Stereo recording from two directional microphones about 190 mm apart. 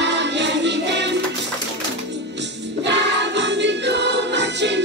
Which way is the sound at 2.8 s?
65° right (ahead or behind).